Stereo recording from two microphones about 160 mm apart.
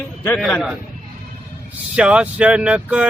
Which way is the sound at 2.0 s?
5° right (ahead or behind).